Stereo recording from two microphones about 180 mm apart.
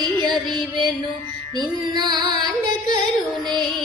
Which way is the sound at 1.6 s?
20° right (ahead or behind).